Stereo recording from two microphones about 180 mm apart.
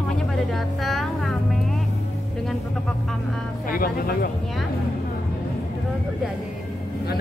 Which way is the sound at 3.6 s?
50° left (ahead or behind).